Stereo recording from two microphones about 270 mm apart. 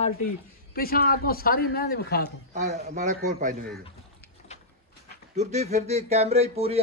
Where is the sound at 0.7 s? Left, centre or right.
Left.